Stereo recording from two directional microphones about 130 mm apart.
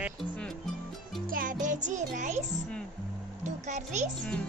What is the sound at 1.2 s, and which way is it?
Music, 90° right.